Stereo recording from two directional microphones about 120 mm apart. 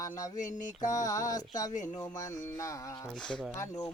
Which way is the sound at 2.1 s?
30° left (ahead or behind).